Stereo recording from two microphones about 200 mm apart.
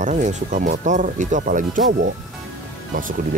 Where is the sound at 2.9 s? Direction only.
40° right (ahead or behind).